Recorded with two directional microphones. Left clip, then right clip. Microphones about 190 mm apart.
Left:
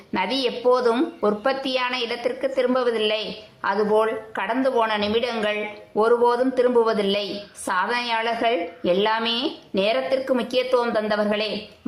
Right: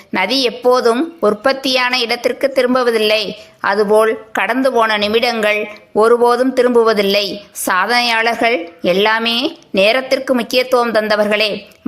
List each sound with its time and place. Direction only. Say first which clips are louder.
0.1 s a woman's voice: right 8 dB; 25° right (ahead or behind)